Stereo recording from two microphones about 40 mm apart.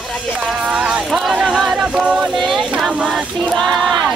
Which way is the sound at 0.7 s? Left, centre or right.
Centre.